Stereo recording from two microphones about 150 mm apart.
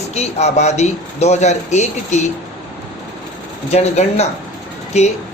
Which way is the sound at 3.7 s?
45° left (ahead or behind).